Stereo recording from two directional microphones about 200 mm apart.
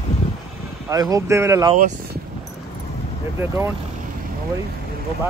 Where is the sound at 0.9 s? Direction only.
15° right (ahead or behind).